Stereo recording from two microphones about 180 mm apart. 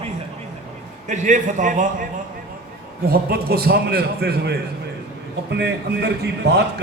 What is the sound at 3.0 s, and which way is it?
A man's voice, 60° right (ahead or behind).